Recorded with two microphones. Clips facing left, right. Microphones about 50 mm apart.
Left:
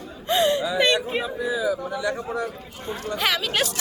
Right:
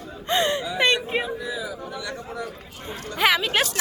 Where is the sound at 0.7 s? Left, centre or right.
Centre.